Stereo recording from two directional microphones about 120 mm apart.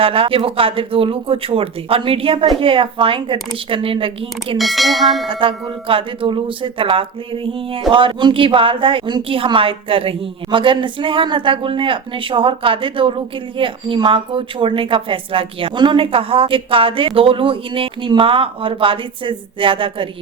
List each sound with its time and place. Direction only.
0.0 s speech: 50° right (ahead or behind)
4.5 s bell: centre (ahead or behind)
5.3 s speech: 45° right (ahead or behind)